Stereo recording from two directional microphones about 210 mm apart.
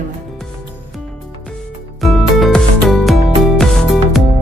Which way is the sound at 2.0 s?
Centre (ahead or behind).